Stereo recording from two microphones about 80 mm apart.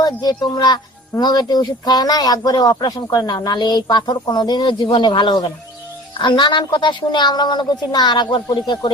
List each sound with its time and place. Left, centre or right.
0.0 s speech: left
3.2 s a woman's voice: left